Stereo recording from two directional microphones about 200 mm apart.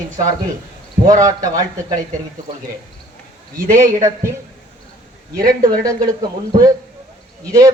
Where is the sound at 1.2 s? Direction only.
20° right (ahead or behind).